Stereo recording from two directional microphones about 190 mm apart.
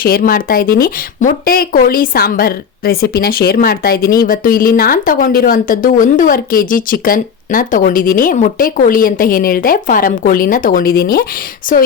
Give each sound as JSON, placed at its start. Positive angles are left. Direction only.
{"t": 0.0, "sound": "speech", "side_deg": 50}